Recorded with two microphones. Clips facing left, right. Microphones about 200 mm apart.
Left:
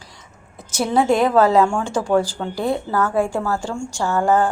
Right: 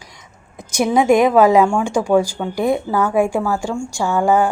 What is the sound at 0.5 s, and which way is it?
A woman's voice, 15° right (ahead or behind).